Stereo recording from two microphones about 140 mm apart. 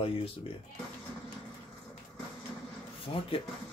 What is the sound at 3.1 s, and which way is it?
Speech, 40° left (ahead or behind).